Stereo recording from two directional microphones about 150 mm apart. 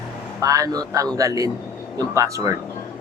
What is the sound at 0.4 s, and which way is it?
Speech, 20° right (ahead or behind).